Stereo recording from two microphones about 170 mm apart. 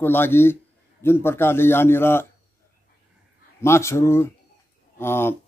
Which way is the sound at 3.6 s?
15° left (ahead or behind).